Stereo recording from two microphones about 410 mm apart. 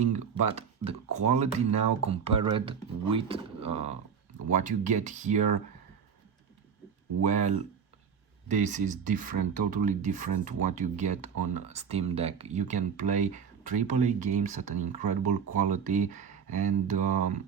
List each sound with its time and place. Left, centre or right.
0.0 s speech: centre
7.3 s speech: centre